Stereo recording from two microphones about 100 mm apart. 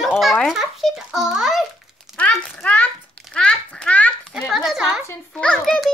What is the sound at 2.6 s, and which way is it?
Speech, 10° left (ahead or behind).